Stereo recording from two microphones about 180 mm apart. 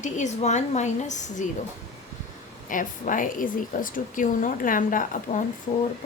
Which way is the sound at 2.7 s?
45° left (ahead or behind).